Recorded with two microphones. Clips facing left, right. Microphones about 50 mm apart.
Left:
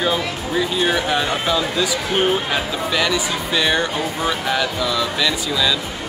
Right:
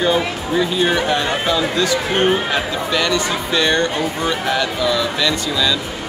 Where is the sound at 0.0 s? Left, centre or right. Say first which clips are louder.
Right 3 dB; centre.